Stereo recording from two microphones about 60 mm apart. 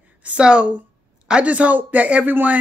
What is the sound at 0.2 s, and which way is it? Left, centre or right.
Speech, centre.